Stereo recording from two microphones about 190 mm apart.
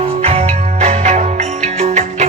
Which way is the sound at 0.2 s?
30° right (ahead or behind).